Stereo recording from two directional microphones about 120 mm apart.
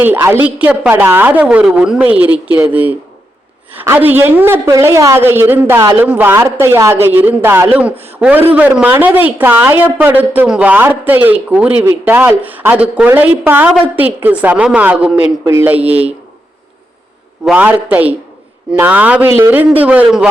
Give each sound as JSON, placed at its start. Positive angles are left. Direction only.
{"t": 0.0, "sound": "a woman's voice", "side_deg": -15}
{"t": 17.4, "sound": "a woman's voice", "side_deg": -10}